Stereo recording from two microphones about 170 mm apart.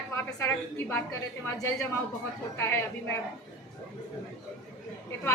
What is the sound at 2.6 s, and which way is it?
Speech, 15° left (ahead or behind).